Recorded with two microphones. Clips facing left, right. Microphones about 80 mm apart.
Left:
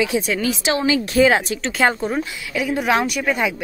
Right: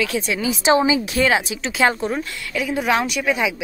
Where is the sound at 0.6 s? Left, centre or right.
Right.